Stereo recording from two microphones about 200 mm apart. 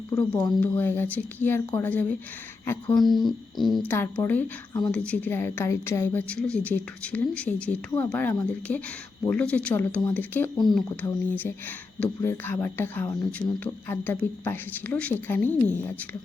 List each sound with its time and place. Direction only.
0.1 s a woman's voice: 20° left (ahead or behind)
3.1 s a sound: centre (ahead or behind)
3.9 s a woman's voice: 10° left (ahead or behind)